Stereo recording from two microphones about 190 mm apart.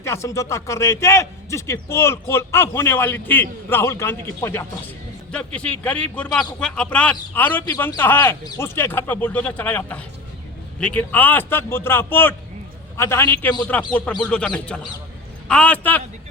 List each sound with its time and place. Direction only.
0.0 s a man's voice: 15° left (ahead or behind)